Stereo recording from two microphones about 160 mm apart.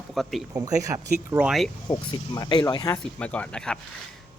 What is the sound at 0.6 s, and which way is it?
Speech, 20° right (ahead or behind).